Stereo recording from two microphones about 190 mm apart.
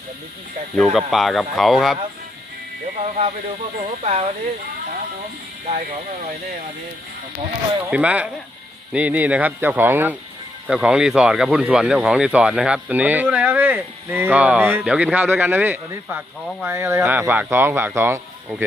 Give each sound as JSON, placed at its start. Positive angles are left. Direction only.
{"t": 0.8, "sound": "speech", "side_deg": 0}
{"t": 3.0, "sound": "speech", "side_deg": -35}
{"t": 5.6, "sound": "speech", "side_deg": -40}
{"t": 7.9, "sound": "speech", "side_deg": -5}